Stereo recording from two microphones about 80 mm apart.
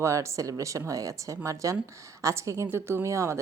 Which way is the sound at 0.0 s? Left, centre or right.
Right.